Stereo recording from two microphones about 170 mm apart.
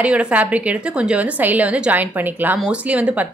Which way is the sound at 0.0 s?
5° right (ahead or behind).